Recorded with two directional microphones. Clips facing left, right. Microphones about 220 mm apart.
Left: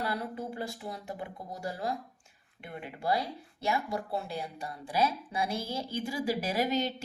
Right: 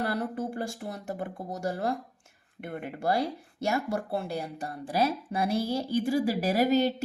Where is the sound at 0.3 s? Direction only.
50° right (ahead or behind).